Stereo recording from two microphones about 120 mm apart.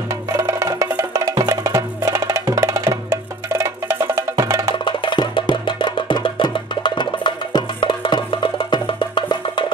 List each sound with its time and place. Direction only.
0.1 s music: 25° right (ahead or behind)
4.8 s music: 40° left (ahead or behind)